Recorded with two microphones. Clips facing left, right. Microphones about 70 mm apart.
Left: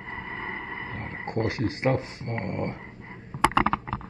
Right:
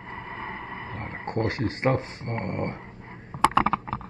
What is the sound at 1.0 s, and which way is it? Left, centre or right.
Speech, right.